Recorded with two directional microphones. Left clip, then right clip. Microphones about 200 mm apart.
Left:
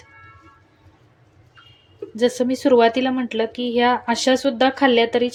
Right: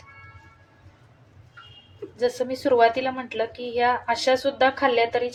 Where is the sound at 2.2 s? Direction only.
45° left (ahead or behind).